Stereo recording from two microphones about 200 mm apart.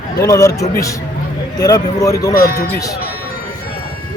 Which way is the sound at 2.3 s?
50° left (ahead or behind).